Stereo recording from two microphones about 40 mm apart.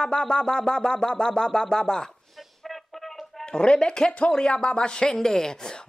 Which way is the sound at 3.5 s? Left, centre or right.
Left.